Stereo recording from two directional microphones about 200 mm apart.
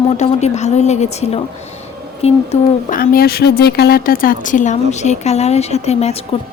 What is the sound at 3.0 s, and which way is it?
Speech, 50° left (ahead or behind).